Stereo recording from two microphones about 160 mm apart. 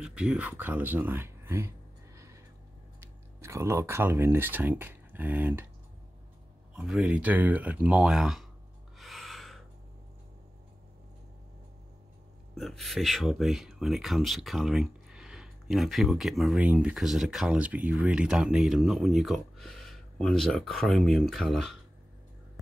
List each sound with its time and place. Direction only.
0.0 s speech: 5° right (ahead or behind)
2.1 s a sound: 20° right (ahead or behind)
3.0 s speech: 15° right (ahead or behind)
6.7 s speech: 5° right (ahead or behind)
8.9 s gasp: centre (ahead or behind)
12.5 s speech: centre (ahead or behind)